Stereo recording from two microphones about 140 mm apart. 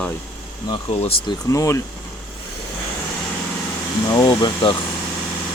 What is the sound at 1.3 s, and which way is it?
Speech, 20° left (ahead or behind).